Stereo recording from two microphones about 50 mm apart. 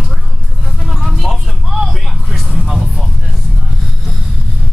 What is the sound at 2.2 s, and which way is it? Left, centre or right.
Vehicle, centre.